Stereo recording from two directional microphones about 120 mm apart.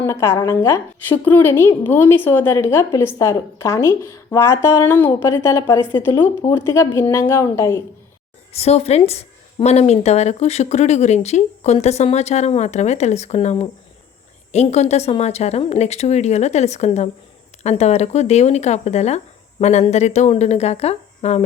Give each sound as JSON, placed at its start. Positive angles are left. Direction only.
{"t": 0.0, "sound": "a woman's voice", "side_deg": 20}
{"t": 8.5, "sound": "speech", "side_deg": 60}